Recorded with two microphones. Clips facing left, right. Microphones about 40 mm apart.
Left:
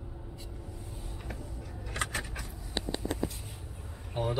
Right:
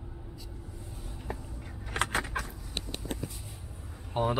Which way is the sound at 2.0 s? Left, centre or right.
Right.